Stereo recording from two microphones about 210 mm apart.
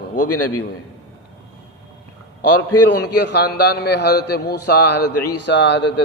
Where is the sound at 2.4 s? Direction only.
90° left.